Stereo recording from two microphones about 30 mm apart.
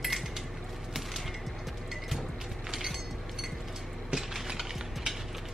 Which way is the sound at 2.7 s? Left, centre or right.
Centre.